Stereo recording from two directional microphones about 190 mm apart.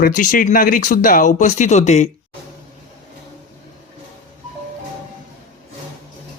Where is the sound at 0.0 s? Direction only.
45° left (ahead or behind).